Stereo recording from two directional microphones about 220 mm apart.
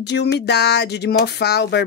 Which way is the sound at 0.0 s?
50° left (ahead or behind).